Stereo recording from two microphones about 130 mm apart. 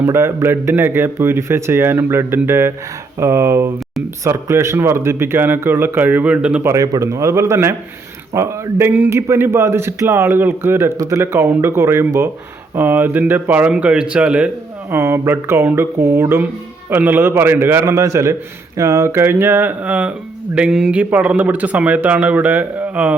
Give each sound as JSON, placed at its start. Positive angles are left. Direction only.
{"t": 0.0, "sound": "a man's voice", "side_deg": -20}
{"t": 6.7, "sound": "a man's voice", "side_deg": -25}